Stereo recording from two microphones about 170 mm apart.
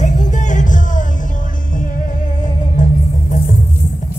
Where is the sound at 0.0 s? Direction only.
45° left (ahead or behind).